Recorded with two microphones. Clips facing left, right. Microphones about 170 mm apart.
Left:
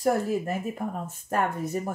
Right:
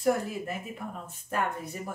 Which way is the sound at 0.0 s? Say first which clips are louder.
Left 3 dB; 40° left (ahead or behind).